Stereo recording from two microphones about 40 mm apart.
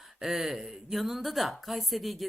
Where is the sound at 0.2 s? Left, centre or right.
Centre.